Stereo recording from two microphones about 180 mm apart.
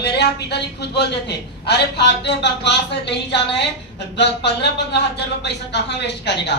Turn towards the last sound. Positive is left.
turn(degrees=70)  # may be behind; listen again after turning